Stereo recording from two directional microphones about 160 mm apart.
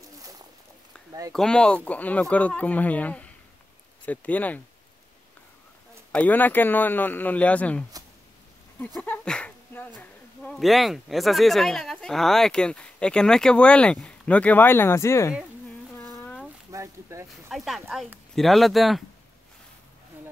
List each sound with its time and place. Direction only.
1.3 s speech: 5° left (ahead or behind)
6.1 s speech: 10° left (ahead or behind)
9.0 s speech: 10° left (ahead or behind)
16.0 s a sound: 20° left (ahead or behind)
16.7 s a sound: 20° right (ahead or behind)
17.5 s speech: centre (ahead or behind)